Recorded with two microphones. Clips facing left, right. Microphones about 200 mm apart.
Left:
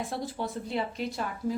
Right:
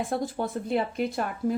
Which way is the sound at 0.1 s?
50° right (ahead or behind).